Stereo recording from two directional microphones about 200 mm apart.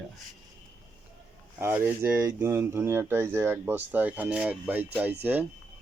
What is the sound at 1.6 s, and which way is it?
Speech, 10° right (ahead or behind).